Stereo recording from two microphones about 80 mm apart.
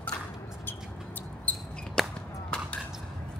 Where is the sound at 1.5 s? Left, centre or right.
Centre.